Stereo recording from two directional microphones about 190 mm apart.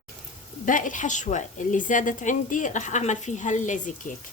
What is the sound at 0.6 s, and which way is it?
A woman's voice, 45° left (ahead or behind).